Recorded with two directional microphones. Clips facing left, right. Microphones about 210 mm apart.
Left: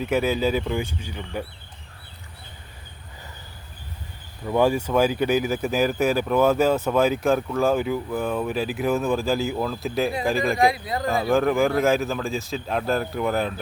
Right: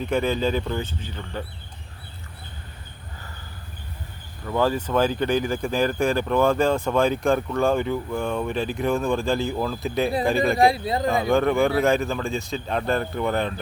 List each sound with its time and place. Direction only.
0.0 s speech: 5° left (ahead or behind)
4.4 s speech: 15° left (ahead or behind)
10.5 s speech: 30° right (ahead or behind)
11.1 s speech: centre (ahead or behind)